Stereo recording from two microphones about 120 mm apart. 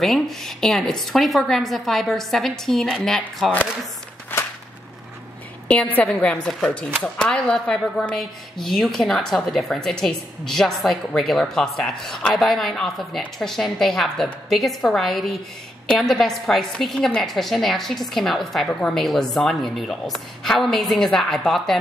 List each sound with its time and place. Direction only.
0.0 s speech: centre (ahead or behind)
4.3 s a sound: 15° left (ahead or behind)
5.7 s speech: 10° left (ahead or behind)